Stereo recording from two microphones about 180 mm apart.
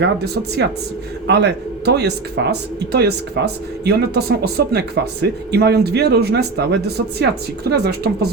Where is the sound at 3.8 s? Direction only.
60° right (ahead or behind).